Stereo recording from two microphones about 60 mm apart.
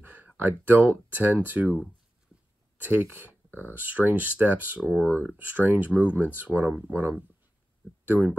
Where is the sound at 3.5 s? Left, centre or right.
Left.